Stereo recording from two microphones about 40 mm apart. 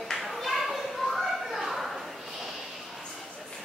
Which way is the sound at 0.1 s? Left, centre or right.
Centre.